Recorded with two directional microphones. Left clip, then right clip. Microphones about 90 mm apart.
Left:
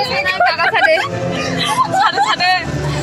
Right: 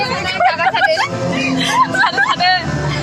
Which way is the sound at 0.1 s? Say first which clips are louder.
Left 1 dB; 40° right (ahead or behind).